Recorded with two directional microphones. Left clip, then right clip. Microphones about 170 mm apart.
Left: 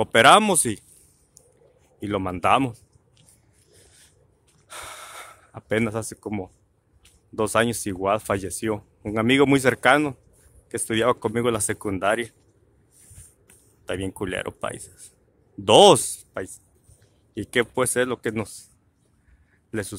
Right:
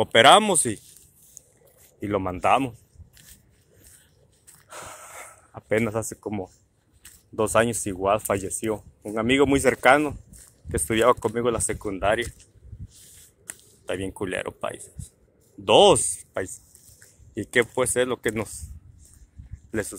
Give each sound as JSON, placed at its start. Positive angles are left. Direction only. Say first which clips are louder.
{"t": 0.0, "sound": "speech", "louder": "even", "side_deg": 20}
{"t": 1.4, "sound": "a sound", "louder": "right 5 dB", "side_deg": 35}
{"t": 2.0, "sound": "speech", "louder": "even", "side_deg": 25}
{"t": 4.6, "sound": "gasp", "louder": "left 2 dB", "side_deg": 45}
{"t": 6.2, "sound": "speech", "louder": "even", "side_deg": 30}
{"t": 9.6, "sound": "speech", "louder": "even", "side_deg": 25}
{"t": 13.8, "sound": "speech", "louder": "even", "side_deg": 25}
{"t": 17.3, "sound": "speech", "louder": "right 1 dB", "side_deg": 20}